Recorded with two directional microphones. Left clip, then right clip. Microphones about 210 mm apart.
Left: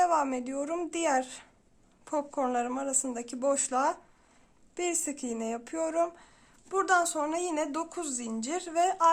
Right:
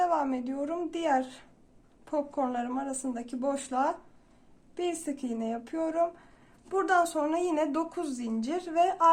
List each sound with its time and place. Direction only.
0.0 s a woman's voice: 30° left (ahead or behind)